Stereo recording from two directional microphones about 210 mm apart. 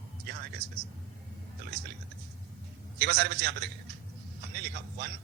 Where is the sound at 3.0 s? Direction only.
50° right (ahead or behind).